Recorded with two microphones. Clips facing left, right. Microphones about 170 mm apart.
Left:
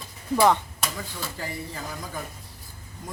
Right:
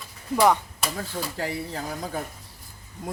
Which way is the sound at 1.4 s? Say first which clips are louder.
Right 4 dB; 60° right (ahead or behind).